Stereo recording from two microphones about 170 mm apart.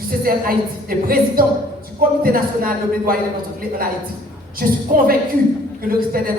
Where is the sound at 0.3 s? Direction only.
60° right (ahead or behind).